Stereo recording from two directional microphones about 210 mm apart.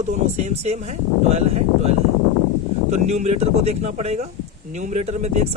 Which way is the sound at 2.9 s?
35° right (ahead or behind).